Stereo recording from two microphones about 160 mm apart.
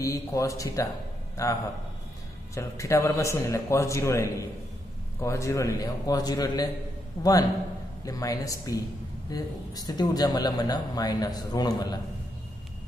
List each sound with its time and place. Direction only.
0.0 s a man's voice: 20° left (ahead or behind)
8.0 s speech: 20° left (ahead or behind)